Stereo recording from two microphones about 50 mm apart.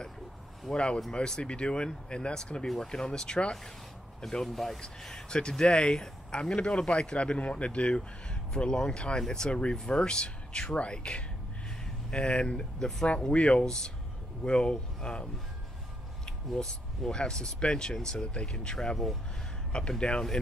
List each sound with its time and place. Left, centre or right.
0.7 s speech: centre
4.2 s speech: centre
16.3 s speech: centre
20.0 s speech: centre